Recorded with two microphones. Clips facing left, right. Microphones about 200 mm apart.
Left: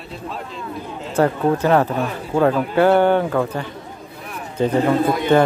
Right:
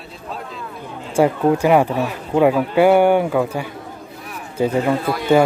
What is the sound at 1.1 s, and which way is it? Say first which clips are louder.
Speech: right 2 dB; 10° right (ahead or behind).